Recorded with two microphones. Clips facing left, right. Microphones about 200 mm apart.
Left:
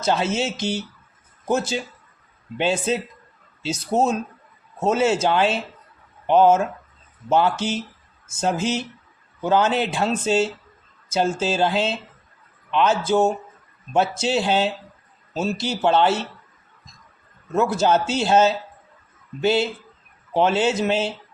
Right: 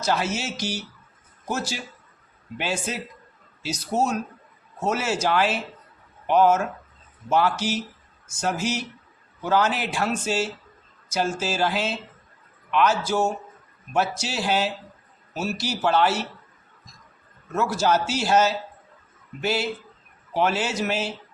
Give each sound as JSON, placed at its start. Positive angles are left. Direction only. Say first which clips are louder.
{"t": 0.0, "sound": "speech", "louder": "left 4 dB", "side_deg": 25}
{"t": 17.6, "sound": "speech", "louder": "left 3 dB", "side_deg": 20}